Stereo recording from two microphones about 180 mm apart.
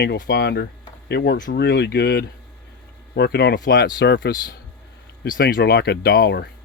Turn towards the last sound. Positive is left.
turn(degrees=65)  # may be behind; listen again after turning